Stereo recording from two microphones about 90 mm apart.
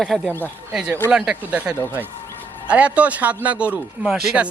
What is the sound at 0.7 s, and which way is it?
Speech, 10° right (ahead or behind).